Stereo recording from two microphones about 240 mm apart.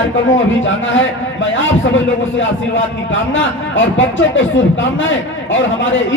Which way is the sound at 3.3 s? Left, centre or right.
Left.